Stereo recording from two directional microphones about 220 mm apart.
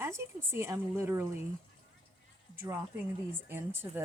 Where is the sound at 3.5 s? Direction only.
10° right (ahead or behind).